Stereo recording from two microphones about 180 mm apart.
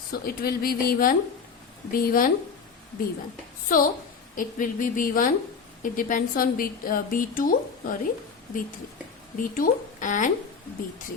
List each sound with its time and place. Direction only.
0.1 s a woman's voice: 55° left (ahead or behind)
3.7 s a woman's voice: 50° left (ahead or behind)
9.4 s a woman's voice: 45° left (ahead or behind)